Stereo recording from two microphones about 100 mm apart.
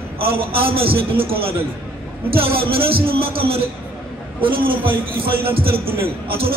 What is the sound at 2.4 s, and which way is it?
A man's voice, 70° right (ahead or behind).